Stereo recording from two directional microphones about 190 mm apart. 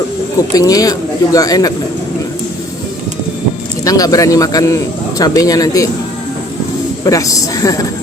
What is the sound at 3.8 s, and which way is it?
Speech, 20° left (ahead or behind).